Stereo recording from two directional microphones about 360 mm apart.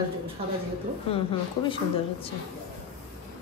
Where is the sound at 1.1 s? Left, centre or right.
Centre.